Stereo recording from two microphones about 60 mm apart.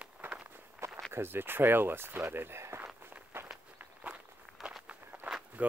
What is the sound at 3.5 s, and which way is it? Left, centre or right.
Walk, right.